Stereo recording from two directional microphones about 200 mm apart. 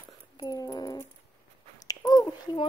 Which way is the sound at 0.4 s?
20° left (ahead or behind).